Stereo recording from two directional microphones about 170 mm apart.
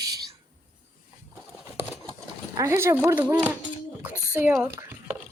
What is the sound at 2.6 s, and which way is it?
Speech, 15° right (ahead or behind).